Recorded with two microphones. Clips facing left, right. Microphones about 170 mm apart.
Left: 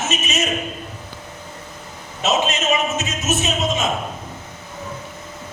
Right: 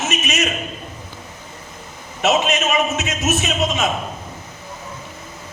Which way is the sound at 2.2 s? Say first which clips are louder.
Right 2 dB; 65° right (ahead or behind).